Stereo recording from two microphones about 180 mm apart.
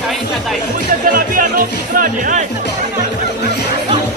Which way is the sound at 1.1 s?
50° right (ahead or behind).